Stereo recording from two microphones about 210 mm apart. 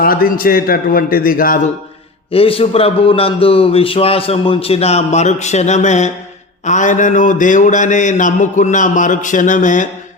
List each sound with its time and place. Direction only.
0.0 s a man's voice: 45° left (ahead or behind)
2.3 s a man's voice: 25° left (ahead or behind)
6.7 s mantra: 35° left (ahead or behind)